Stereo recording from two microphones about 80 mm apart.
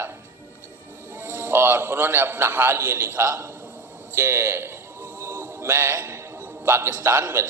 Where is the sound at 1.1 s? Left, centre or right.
Right.